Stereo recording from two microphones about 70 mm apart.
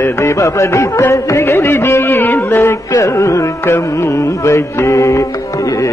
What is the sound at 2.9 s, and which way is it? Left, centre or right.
Music, left.